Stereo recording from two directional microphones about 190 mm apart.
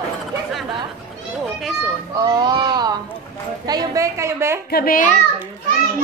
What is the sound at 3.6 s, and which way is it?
Speech, 20° right (ahead or behind).